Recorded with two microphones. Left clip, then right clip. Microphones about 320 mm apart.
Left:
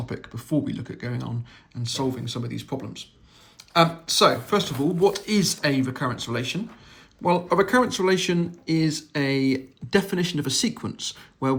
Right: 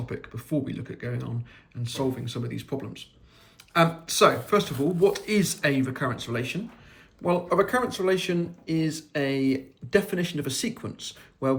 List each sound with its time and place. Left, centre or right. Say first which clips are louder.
0.0 s speech: left 1 dB; centre